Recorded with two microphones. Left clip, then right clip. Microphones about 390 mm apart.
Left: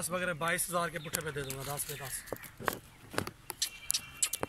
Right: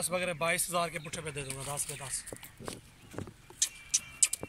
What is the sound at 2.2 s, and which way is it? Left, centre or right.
Walk, left.